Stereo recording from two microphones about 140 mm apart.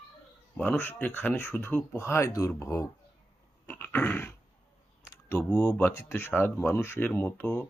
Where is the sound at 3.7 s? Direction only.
15° left (ahead or behind).